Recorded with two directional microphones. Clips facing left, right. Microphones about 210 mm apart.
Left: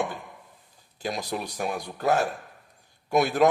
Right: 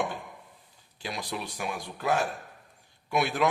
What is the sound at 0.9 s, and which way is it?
A man's voice, 45° left (ahead or behind).